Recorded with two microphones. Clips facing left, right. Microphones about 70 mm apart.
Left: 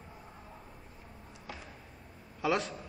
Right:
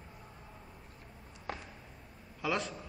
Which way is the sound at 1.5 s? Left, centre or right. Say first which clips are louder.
Right 4 dB; right.